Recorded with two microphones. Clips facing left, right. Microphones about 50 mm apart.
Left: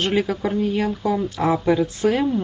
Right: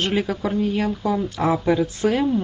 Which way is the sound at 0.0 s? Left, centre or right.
Centre.